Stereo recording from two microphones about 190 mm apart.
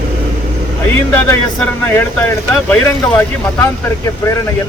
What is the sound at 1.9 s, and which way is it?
Speech, 10° left (ahead or behind).